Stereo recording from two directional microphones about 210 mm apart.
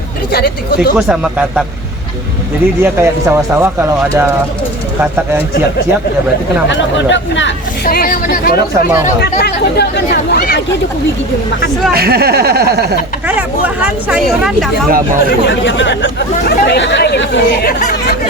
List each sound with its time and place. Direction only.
0.3 s speech: 50° left (ahead or behind)
0.9 s speech: 5° right (ahead or behind)
2.8 s speech: 10° right (ahead or behind)
6.7 s speech: 60° left (ahead or behind)
7.9 s speech: 45° left (ahead or behind)
11.9 s speech: 50° right (ahead or behind)
14.1 s speech: centre (ahead or behind)
15.3 s speech: 60° left (ahead or behind)